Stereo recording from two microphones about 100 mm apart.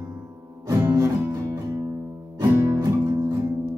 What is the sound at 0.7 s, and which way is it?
Music, 30° right (ahead or behind).